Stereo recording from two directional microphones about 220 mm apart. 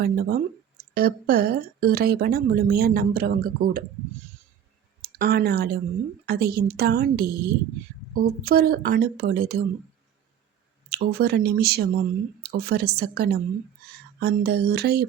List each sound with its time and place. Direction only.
0.0 s a woman's voice: 45° right (ahead or behind)
5.0 s a woman's voice: 45° right (ahead or behind)
10.8 s a woman's voice: 45° right (ahead or behind)